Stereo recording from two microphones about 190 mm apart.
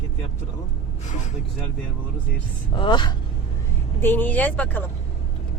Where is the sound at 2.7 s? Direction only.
25° left (ahead or behind).